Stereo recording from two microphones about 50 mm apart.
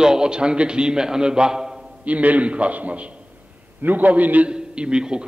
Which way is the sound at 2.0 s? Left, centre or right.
Right.